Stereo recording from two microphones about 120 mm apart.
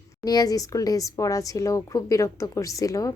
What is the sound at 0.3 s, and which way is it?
Speech, 30° left (ahead or behind).